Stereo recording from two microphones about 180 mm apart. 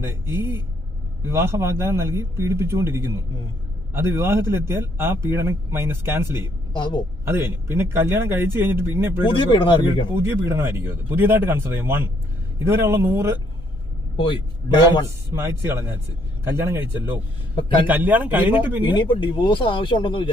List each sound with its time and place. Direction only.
0.0 s speech: 15° right (ahead or behind)
6.3 s speech: 25° left (ahead or behind)
7.3 s speech: 15° right (ahead or behind)
9.2 s speech: 30° left (ahead or behind)
10.1 s speech: 15° right (ahead or behind)
15.3 s speech: 15° right (ahead or behind)
17.5 s a man's voice: 25° left (ahead or behind)
17.8 s speech: 10° right (ahead or behind)
18.9 s speech: 25° left (ahead or behind)